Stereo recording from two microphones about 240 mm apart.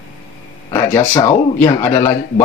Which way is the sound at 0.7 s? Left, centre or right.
Centre.